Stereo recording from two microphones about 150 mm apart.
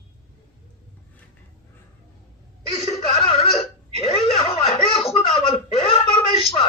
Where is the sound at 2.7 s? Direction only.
40° left (ahead or behind).